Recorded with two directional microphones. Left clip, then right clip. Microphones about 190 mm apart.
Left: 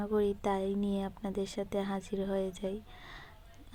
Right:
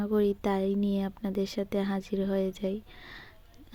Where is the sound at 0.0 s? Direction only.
20° right (ahead or behind).